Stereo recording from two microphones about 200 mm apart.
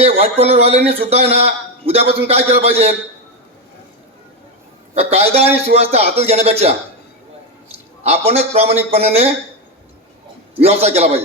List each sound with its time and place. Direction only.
0.0 s a man's voice: 30° right (ahead or behind)
4.9 s a man's voice: 30° right (ahead or behind)
8.0 s a man's voice: 30° right (ahead or behind)
10.6 s a man's voice: 30° right (ahead or behind)